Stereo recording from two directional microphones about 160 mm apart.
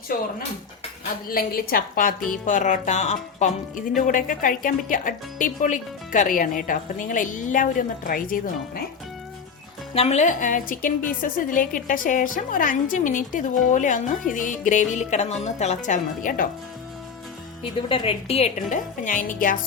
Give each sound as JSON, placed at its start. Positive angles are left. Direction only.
{"t": 1.3, "sound": "a woman's voice", "side_deg": 65}
{"t": 2.3, "sound": "speech", "side_deg": 55}
{"t": 3.9, "sound": "a woman's voice", "side_deg": 55}
{"t": 9.9, "sound": "a woman's voice", "side_deg": 40}
{"t": 17.6, "sound": "a woman's voice", "side_deg": 35}